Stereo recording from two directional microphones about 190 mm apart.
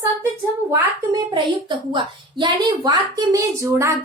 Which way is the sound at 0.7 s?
20° right (ahead or behind).